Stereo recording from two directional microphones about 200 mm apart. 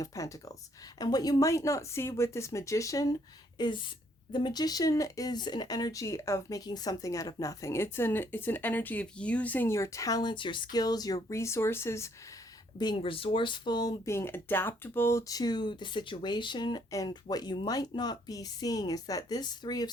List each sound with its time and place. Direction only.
0.0 s speech: 15° left (ahead or behind)
12.8 s speech: 25° left (ahead or behind)